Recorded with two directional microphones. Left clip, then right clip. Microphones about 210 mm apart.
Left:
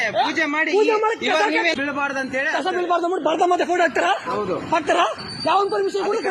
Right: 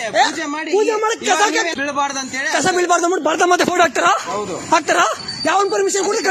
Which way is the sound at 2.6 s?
55° right (ahead or behind).